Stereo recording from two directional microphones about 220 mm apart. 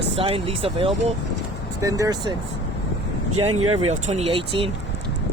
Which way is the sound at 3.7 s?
30° right (ahead or behind).